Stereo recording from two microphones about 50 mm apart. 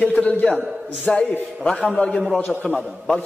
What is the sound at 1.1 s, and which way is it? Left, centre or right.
A man's voice, centre.